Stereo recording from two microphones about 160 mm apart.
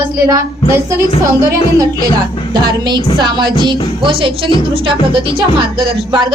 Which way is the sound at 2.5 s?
25° right (ahead or behind).